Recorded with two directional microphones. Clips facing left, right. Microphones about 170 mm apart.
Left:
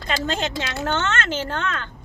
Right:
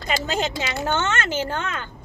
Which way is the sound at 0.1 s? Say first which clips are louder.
Even; 10° right (ahead or behind).